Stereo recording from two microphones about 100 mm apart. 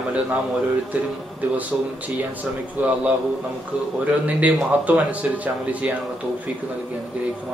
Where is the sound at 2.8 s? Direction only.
15° right (ahead or behind).